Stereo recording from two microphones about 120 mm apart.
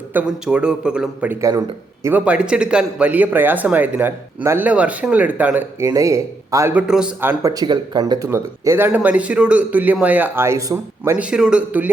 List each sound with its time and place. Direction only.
0.1 s speech: 10° right (ahead or behind)
1.3 s speech: 25° right (ahead or behind)
2.0 s speech: 10° right (ahead or behind)
5.9 s speech: 25° right (ahead or behind)
6.7 s speech: 5° right (ahead or behind)
7.2 s speech: 20° right (ahead or behind)
7.5 s speech: 35° right (ahead or behind)
11.2 s speech: 5° right (ahead or behind)